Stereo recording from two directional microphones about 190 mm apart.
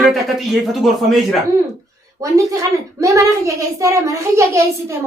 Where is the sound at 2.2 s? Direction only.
15° right (ahead or behind).